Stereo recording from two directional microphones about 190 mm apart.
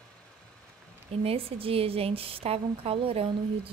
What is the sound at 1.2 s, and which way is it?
A woman's voice, 30° right (ahead or behind).